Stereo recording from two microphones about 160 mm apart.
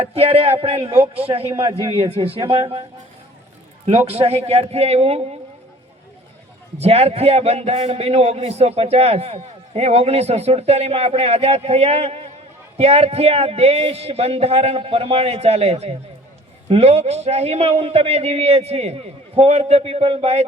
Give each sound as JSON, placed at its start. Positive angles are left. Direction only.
{"t": 0.0, "sound": "a man's voice", "side_deg": -40}
{"t": 3.8, "sound": "a man's voice", "side_deg": -40}
{"t": 6.7, "sound": "a man's voice", "side_deg": -40}